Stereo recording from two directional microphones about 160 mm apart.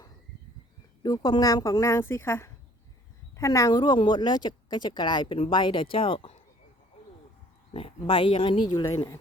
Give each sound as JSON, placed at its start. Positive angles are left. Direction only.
{"t": 1.0, "sound": "speech", "side_deg": 25}
{"t": 7.7, "sound": "speech", "side_deg": 35}